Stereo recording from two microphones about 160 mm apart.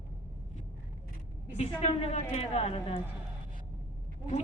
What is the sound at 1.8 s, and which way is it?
Speech, 40° left (ahead or behind).